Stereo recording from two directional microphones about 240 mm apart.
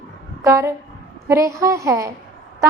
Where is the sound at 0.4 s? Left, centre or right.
Centre.